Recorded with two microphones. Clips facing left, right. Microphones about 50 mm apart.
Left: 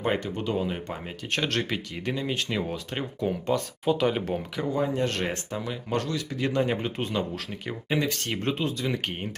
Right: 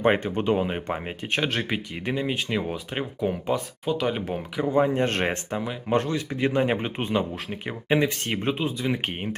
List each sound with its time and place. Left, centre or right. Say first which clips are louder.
0.3 s speech: right 4 dB; right
1.3 s speech: right 1 dB; centre
4.7 s speech: right 5 dB; right; by 9.3 s centre